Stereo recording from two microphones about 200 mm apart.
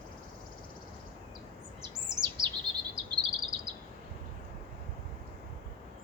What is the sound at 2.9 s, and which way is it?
Bird vocalization, 25° right (ahead or behind).